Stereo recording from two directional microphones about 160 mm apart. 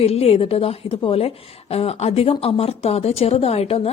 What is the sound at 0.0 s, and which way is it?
A woman's voice, 40° left (ahead or behind).